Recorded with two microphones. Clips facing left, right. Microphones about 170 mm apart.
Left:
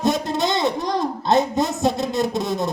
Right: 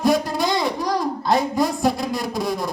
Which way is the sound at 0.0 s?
25° left (ahead or behind).